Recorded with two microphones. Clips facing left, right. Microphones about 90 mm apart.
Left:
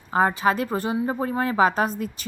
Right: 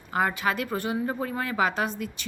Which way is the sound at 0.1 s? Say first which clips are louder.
Left 5 dB; 30° left (ahead or behind).